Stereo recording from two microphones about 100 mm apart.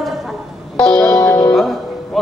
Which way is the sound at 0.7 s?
10° left (ahead or behind).